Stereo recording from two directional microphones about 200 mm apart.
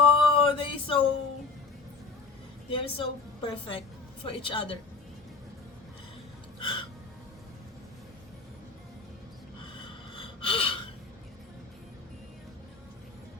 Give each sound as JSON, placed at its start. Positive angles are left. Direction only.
{"t": 0.0, "sound": "a sound", "side_deg": 25}
{"t": 2.6, "sound": "a woman's voice", "side_deg": 25}
{"t": 6.6, "sound": "music", "side_deg": 25}
{"t": 10.2, "sound": "gasp", "side_deg": 25}